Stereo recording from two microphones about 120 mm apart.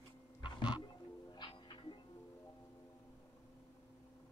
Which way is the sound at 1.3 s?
40° left (ahead or behind).